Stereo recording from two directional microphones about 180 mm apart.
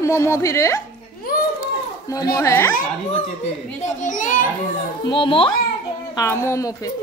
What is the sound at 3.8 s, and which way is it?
Speech, 45° left (ahead or behind).